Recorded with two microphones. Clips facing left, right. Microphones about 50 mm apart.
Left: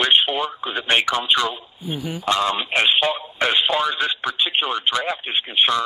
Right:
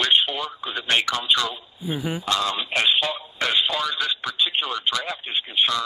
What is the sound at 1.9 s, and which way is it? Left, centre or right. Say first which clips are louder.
Speech: right 1 dB; right.